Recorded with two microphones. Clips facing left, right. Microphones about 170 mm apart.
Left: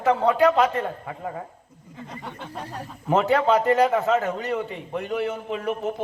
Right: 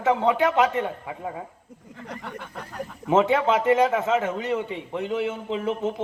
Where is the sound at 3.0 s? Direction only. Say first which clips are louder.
Even; 20° right (ahead or behind).